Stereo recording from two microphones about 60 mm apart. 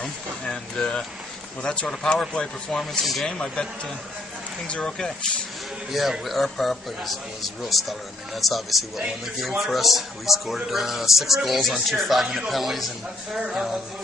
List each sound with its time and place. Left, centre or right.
0.0 s speech: centre
4.6 s speech: centre
5.9 s speech: centre